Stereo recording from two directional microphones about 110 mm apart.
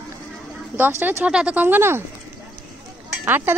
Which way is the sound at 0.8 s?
20° right (ahead or behind).